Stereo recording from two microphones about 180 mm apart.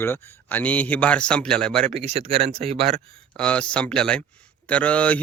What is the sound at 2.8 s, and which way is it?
Speech, 5° left (ahead or behind).